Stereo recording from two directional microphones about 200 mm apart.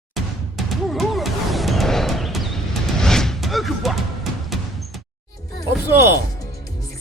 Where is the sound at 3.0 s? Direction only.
Centre (ahead or behind).